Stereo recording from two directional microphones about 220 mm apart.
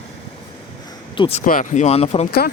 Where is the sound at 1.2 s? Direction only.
25° left (ahead or behind).